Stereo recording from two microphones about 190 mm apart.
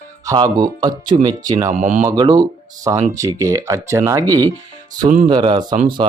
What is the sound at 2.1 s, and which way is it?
Speech, 20° right (ahead or behind).